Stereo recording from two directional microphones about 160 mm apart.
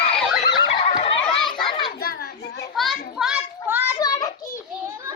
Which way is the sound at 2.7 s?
Centre (ahead or behind).